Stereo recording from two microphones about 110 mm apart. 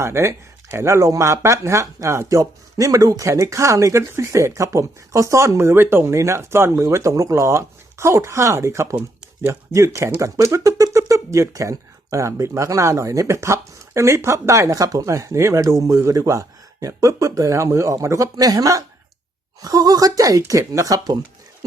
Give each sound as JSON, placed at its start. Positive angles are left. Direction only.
{"t": 0.0, "sound": "speech", "side_deg": -25}